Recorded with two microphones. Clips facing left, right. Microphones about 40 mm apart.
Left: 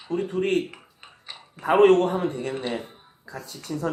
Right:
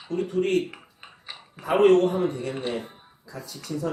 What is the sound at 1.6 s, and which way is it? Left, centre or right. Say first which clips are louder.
Speech: left 1 dB; left.